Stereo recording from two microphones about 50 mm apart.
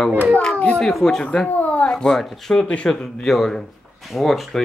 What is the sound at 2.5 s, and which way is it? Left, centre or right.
Speech, left.